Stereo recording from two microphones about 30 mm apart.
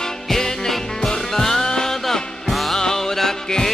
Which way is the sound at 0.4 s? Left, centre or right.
Centre.